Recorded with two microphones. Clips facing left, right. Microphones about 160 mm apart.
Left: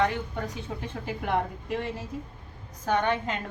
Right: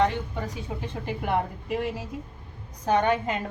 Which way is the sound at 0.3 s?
5° right (ahead or behind).